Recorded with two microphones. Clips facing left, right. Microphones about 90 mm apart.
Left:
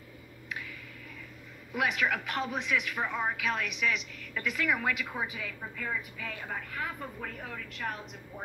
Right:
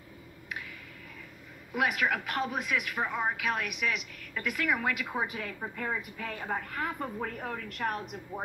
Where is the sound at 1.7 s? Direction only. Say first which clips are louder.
Right 1 dB; 5° right (ahead or behind).